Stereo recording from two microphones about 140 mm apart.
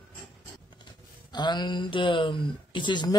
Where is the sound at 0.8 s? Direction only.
30° left (ahead or behind).